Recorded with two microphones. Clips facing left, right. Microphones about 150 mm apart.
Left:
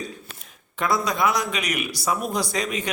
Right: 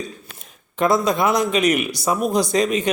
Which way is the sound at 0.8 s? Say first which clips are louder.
Right 5 dB; 25° right (ahead or behind).